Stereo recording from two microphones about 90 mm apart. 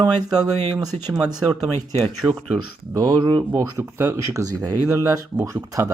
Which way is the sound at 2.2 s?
25° right (ahead or behind).